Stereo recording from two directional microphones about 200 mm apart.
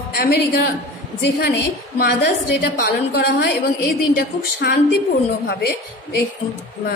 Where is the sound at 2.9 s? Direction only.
55° left (ahead or behind).